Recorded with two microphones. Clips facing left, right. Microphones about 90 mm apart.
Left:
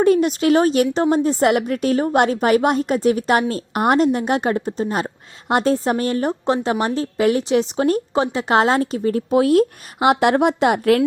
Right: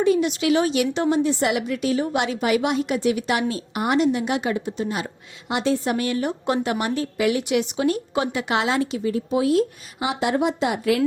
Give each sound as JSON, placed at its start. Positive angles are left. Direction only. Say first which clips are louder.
{"t": 0.0, "sound": "a woman's voice", "louder": "left 4 dB", "side_deg": 50}